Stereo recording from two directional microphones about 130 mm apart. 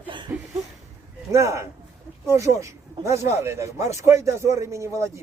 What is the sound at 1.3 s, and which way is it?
Speech, 20° right (ahead or behind).